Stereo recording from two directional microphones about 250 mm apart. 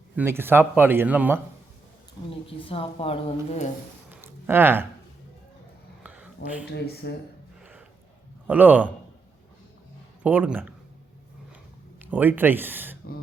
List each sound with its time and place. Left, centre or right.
0.2 s speech: centre
2.3 s speech: left
4.1 s a sound: centre
6.0 s a sound: centre
6.7 s speech: left
7.6 s a sound: centre
8.4 s speech: centre
10.2 s speech: centre
12.1 s speech: centre